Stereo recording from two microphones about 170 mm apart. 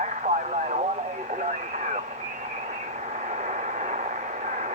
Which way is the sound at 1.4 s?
45° right (ahead or behind).